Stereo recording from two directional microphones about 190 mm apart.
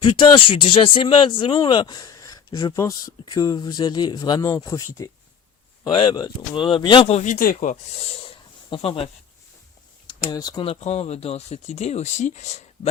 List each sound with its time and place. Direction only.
0.0 s speech: 25° left (ahead or behind); by 8.1 s 40° left (ahead or behind)
8.3 s a sound: 30° left (ahead or behind)
10.1 s speech: 20° left (ahead or behind); by 12.9 s 35° left (ahead or behind)